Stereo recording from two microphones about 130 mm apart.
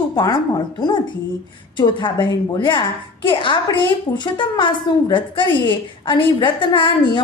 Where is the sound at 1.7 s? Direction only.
40° left (ahead or behind).